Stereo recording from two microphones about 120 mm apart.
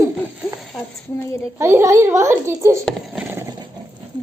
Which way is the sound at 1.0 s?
20° left (ahead or behind).